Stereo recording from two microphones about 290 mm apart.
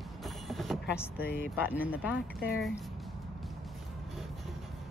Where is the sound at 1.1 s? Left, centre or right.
Left.